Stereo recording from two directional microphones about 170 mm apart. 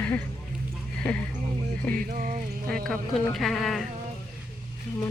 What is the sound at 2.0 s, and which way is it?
Music, 55° right (ahead or behind).